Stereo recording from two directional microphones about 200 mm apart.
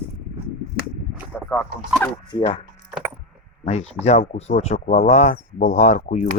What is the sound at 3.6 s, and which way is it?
Speech, 30° left (ahead or behind).